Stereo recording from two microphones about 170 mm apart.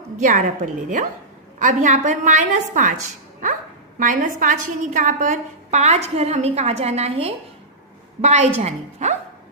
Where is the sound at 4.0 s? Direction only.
50° right (ahead or behind).